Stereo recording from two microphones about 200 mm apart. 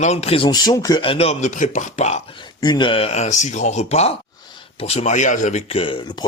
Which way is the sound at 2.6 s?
20° left (ahead or behind).